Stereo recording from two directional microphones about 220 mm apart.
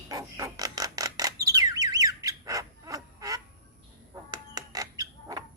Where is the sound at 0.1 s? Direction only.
15° right (ahead or behind).